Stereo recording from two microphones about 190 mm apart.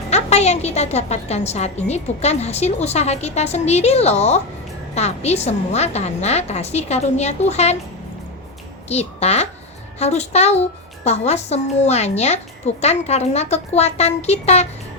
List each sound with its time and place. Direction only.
0.1 s speech: 35° left (ahead or behind)
8.9 s a child's voice: 35° left (ahead or behind)